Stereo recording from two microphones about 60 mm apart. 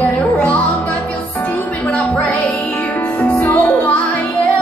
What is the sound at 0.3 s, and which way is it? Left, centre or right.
Music, left.